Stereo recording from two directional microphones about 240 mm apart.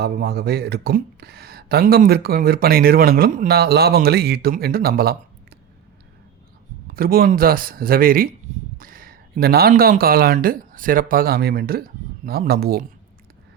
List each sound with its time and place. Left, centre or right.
0.0 s speech: right
6.8 s speech: right